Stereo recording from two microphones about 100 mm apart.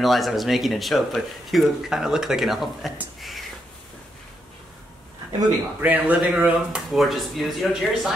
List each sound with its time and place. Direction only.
0.0 s speech: centre (ahead or behind)
3.2 s a sound: centre (ahead or behind)
5.8 s speech: 15° right (ahead or behind)